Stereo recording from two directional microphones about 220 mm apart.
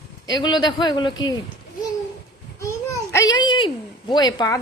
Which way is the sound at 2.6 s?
15° left (ahead or behind).